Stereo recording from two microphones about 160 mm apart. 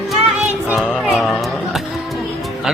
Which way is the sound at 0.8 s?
Centre (ahead or behind).